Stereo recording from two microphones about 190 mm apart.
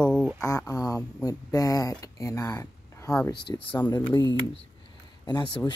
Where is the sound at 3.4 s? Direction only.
25° left (ahead or behind).